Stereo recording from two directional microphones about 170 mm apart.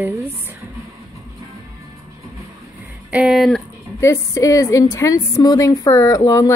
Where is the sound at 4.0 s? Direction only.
20° left (ahead or behind).